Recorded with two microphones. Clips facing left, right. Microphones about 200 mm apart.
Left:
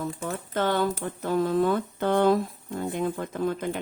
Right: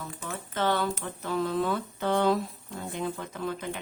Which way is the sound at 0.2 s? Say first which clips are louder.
Even; 45° left (ahead or behind).